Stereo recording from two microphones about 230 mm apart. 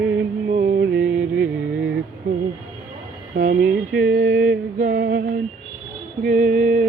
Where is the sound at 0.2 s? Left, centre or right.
Right.